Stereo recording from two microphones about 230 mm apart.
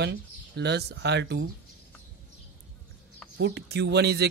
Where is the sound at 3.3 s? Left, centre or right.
Right.